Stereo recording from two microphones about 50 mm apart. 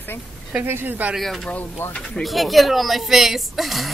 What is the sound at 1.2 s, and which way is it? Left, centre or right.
Speech, centre.